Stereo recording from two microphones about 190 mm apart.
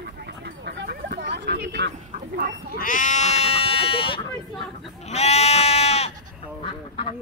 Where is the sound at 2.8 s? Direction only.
45° left (ahead or behind).